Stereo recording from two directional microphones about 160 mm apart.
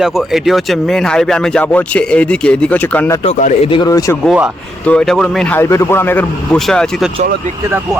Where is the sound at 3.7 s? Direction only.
25° left (ahead or behind).